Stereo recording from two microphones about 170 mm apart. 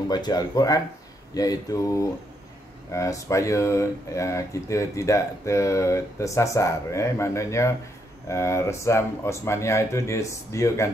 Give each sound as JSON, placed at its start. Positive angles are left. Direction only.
{"t": 0.1, "sound": "speech", "side_deg": 25}